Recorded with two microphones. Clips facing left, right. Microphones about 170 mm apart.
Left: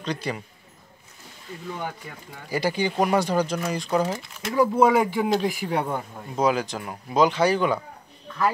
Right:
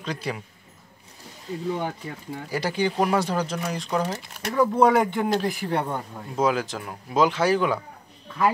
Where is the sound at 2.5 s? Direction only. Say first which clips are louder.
Left 1 dB; centre (ahead or behind).